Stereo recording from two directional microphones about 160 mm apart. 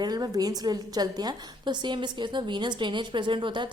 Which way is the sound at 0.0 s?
25° right (ahead or behind).